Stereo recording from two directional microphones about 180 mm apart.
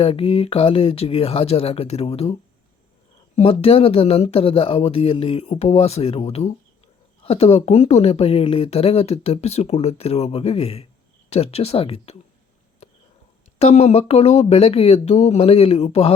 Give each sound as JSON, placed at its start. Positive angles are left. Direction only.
{"t": 0.0, "sound": "speech", "side_deg": 30}
{"t": 3.3, "sound": "speech", "side_deg": 30}
{"t": 13.6, "sound": "speech", "side_deg": 35}